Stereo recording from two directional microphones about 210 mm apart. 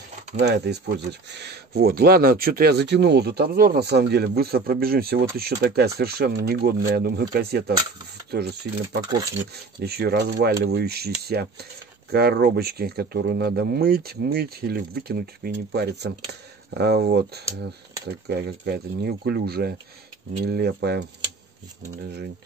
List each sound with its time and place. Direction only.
0.4 s speech: 55° right (ahead or behind)
22.0 s speech: 50° right (ahead or behind)